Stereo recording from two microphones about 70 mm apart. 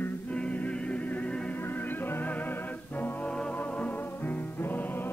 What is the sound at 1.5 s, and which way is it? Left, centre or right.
Music, left.